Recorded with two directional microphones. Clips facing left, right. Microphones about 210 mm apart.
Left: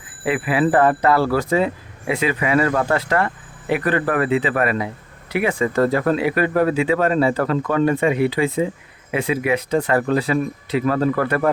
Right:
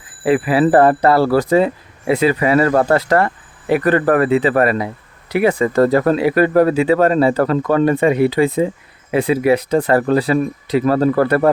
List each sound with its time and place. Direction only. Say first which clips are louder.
0.3 s speech: right 5 dB; 35° right (ahead or behind)